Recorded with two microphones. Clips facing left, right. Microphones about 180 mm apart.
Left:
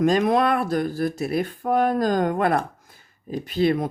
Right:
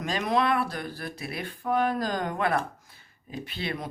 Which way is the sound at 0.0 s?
50° left (ahead or behind).